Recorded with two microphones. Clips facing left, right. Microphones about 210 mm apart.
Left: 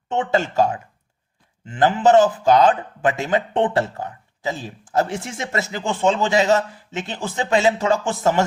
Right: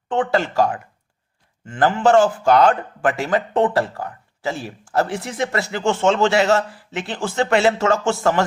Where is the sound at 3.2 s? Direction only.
25° left (ahead or behind).